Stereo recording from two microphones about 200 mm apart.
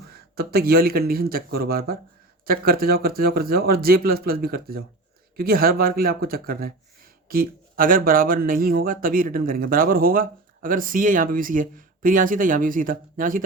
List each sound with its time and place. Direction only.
0.1 s speech: 50° right (ahead or behind)